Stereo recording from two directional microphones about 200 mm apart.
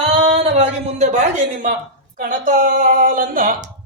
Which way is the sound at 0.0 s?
30° right (ahead or behind).